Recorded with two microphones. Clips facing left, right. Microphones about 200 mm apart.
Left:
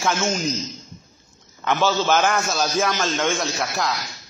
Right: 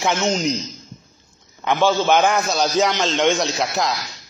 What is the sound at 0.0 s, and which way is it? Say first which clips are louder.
Speech: right 3 dB; 20° right (ahead or behind).